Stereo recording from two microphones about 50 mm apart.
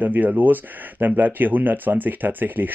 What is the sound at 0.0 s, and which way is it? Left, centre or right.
Speech, right.